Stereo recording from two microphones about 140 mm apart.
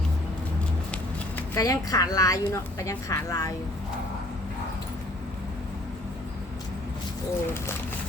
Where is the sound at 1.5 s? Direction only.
25° left (ahead or behind).